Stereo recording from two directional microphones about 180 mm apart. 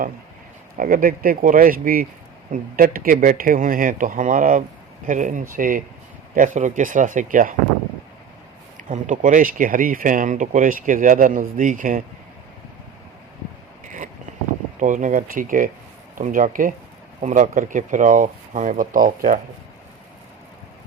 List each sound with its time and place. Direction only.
0.8 s speech: 50° right (ahead or behind)
8.8 s speech: 45° right (ahead or behind)
13.8 s a sound: 45° right (ahead or behind)
14.8 s speech: 45° right (ahead or behind)